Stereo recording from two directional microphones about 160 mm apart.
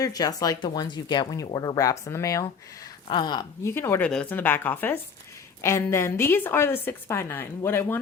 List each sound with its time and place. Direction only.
0.0 s speech: 25° left (ahead or behind)
3.8 s a woman's voice: 15° left (ahead or behind)